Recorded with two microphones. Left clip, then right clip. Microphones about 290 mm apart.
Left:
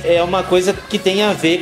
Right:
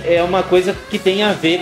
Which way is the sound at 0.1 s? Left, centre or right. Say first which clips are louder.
Right 1 dB; left.